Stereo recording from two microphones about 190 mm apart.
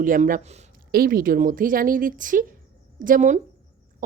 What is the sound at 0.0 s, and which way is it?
Speech, 45° right (ahead or behind).